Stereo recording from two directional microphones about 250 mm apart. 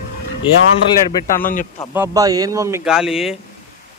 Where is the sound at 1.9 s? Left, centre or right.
Centre.